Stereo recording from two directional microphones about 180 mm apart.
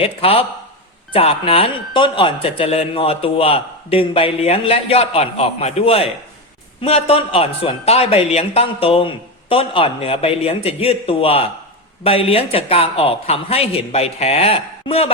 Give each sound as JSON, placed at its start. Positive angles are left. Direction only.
{"t": 0.0, "sound": "speech", "side_deg": 30}